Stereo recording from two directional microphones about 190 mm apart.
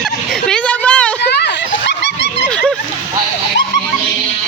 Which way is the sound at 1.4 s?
65° left (ahead or behind).